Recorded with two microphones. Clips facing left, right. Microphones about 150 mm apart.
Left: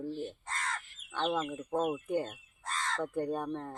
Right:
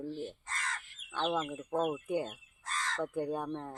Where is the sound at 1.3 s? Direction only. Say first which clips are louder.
Left 1 dB; centre (ahead or behind).